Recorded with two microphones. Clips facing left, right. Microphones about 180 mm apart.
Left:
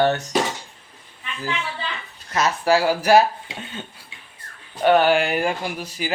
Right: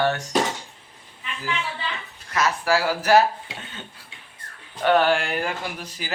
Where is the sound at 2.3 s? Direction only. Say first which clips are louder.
Left 3 dB; 20° left (ahead or behind).